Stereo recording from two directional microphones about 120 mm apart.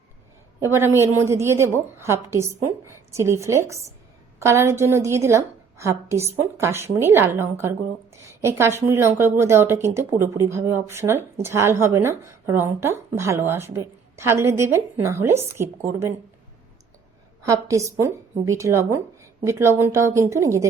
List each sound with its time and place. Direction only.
0.6 s speech: 20° right (ahead or behind)
17.4 s speech: 25° right (ahead or behind)